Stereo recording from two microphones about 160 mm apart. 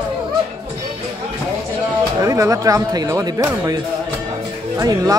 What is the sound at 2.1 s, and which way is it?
Speech, 20° right (ahead or behind).